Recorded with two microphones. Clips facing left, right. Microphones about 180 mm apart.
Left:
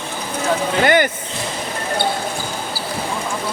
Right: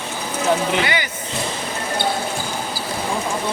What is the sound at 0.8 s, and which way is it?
Speech, 50° left (ahead or behind).